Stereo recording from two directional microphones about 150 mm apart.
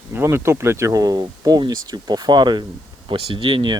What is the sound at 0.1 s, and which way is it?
Speech, 15° right (ahead or behind).